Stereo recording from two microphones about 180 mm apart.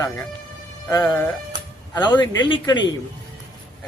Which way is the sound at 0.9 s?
15° left (ahead or behind).